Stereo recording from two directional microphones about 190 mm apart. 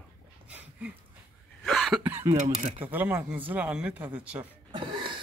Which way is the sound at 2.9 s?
10° right (ahead or behind).